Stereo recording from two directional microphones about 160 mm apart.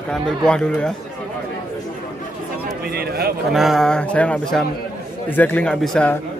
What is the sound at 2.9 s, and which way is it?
Speech, 85° right.